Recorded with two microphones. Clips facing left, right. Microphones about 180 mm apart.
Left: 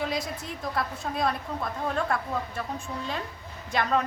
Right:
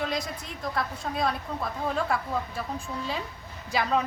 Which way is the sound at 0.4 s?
Centre (ahead or behind).